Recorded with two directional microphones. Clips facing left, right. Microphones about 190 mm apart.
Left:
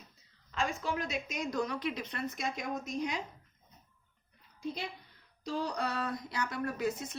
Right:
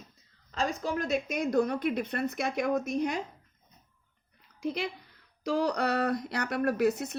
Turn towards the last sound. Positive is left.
turn(degrees=-70)  # may be behind; listen again after turning